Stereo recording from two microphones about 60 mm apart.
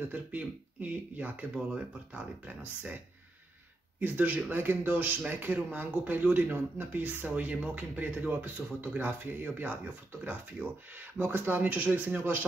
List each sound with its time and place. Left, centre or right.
0.1 s speech: right
4.0 s speech: right